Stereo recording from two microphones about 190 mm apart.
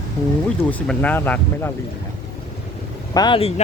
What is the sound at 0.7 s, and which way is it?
Speech, 10° left (ahead or behind).